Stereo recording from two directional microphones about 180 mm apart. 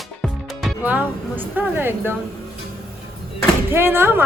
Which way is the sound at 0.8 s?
10° right (ahead or behind).